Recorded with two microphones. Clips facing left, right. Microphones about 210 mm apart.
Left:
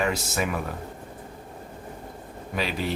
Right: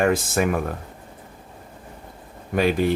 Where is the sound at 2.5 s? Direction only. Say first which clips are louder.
Right 9 dB; 50° right (ahead or behind).